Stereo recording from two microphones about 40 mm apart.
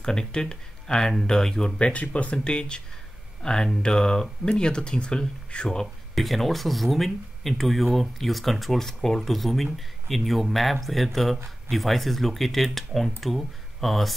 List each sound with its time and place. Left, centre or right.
0.0 s speech: centre
1.8 s speech: left
2.3 s speech: left
5.8 s speech: centre